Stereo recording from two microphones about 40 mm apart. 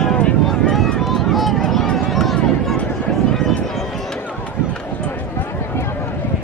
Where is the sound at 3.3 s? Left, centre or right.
Centre.